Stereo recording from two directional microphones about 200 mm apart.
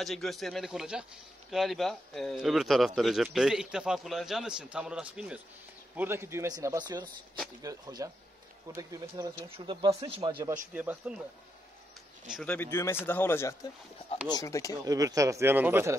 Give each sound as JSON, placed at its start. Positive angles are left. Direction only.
{"t": 0.0, "sound": "a man's voice", "side_deg": 0}
{"t": 10.7, "sound": "a man's voice", "side_deg": -10}
{"t": 12.3, "sound": "speech", "side_deg": 5}
{"t": 14.9, "sound": "a man's voice", "side_deg": -15}